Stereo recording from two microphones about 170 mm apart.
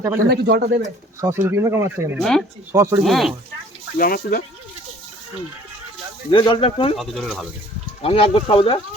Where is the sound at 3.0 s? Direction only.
Centre (ahead or behind).